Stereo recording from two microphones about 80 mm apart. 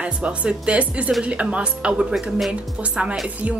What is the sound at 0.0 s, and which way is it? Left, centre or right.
A woman's voice, centre.